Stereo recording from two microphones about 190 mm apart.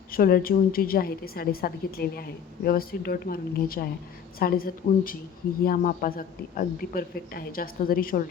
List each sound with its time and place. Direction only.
0.1 s speech: 50° left (ahead or behind)